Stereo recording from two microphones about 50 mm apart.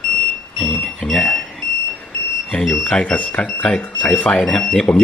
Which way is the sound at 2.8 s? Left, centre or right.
Left.